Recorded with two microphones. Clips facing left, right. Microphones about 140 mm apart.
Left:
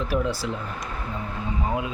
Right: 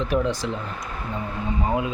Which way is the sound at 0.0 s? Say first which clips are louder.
Right 2 dB; 10° left (ahead or behind).